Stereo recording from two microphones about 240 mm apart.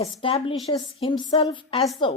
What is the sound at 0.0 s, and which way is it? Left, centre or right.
A woman's voice, left.